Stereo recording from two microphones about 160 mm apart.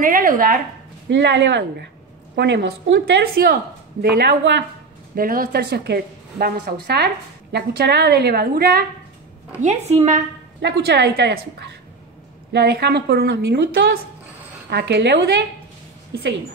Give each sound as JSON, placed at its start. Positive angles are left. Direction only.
{"t": 0.0, "sound": "speech", "side_deg": -60}
{"t": 1.0, "sound": "a woman's voice", "side_deg": -90}
{"t": 5.1, "sound": "a woman's voice", "side_deg": -65}
{"t": 9.6, "sound": "a woman's voice", "side_deg": -45}
{"t": 10.6, "sound": "a woman's voice", "side_deg": -90}
{"t": 12.5, "sound": "a woman's voice", "side_deg": -90}